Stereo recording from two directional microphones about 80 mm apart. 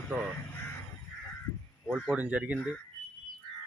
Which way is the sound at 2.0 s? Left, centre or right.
Centre.